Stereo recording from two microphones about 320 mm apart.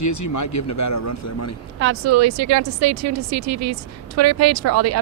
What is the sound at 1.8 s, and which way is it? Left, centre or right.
Speech, right.